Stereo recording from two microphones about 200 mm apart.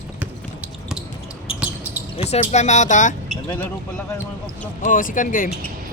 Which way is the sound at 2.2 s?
30° left (ahead or behind).